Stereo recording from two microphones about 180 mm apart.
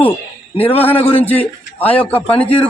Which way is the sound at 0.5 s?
30° left (ahead or behind).